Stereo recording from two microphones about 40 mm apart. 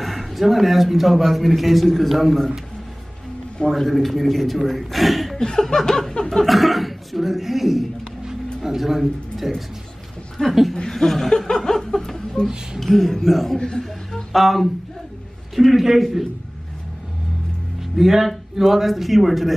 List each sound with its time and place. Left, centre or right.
0.0 s a man's voice: centre
3.6 s a man's voice: centre
5.4 s speech: centre
6.3 s a man's voice: centre
13.6 s a man's voice: centre
13.8 s a sound: centre
15.5 s a man's voice: centre
17.9 s a man's voice: centre